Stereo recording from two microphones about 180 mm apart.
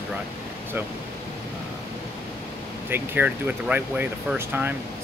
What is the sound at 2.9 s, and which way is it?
Speech, 10° right (ahead or behind).